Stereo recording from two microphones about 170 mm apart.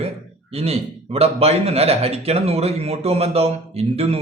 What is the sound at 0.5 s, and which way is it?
A man's voice, 35° right (ahead or behind).